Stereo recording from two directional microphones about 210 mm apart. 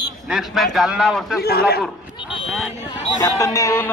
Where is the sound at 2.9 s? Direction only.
15° left (ahead or behind).